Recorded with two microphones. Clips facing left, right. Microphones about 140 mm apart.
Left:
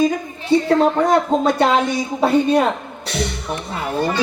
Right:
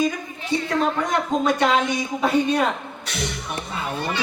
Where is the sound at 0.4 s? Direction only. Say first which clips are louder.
Left 8 dB; 35° left (ahead or behind).